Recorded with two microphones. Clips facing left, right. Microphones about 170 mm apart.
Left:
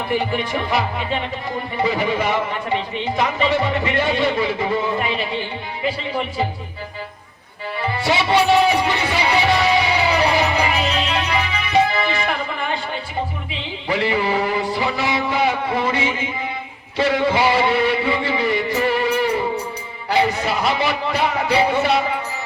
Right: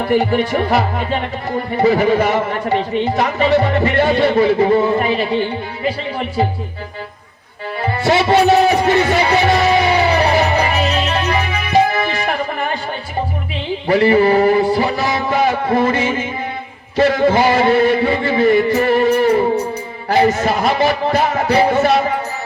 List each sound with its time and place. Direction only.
0.0 s speech: 45° right (ahead or behind)
7.8 s music: 45° right (ahead or behind)
13.8 s a sound: 45° right (ahead or behind)
17.0 s speech: 45° right (ahead or behind)